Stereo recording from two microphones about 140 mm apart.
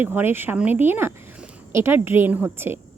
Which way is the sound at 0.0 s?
15° right (ahead or behind).